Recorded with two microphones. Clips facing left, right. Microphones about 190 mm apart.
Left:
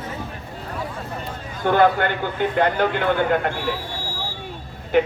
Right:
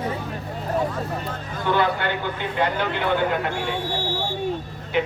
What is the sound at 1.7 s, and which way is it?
Speech, 50° left (ahead or behind).